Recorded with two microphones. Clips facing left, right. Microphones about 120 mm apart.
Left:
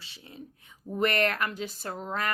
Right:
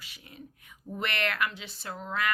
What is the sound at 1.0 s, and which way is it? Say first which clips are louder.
A woman's voice: left 5 dB; 40° left (ahead or behind).